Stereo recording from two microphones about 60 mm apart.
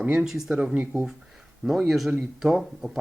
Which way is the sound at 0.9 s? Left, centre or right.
Centre.